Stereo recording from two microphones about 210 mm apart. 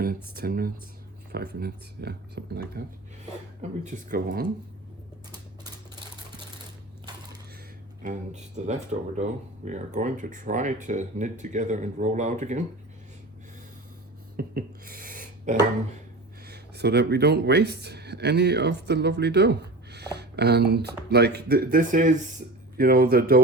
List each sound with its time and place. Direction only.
0.3 s speech: 45° right (ahead or behind)
3.6 s speech: 35° right (ahead or behind)
8.0 s speech: 35° right (ahead or behind)
14.3 s a sound: 45° right (ahead or behind)
16.5 s speech: 50° right (ahead or behind)